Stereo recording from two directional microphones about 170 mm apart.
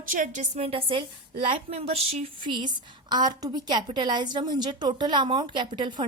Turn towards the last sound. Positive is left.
turn(degrees=-30)  # may be behind; listen again after turning